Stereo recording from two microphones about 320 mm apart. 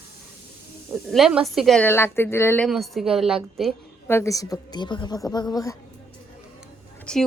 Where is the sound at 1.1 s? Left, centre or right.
Centre.